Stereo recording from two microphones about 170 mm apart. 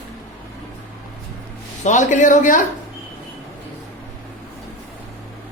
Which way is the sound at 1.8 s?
45° left (ahead or behind).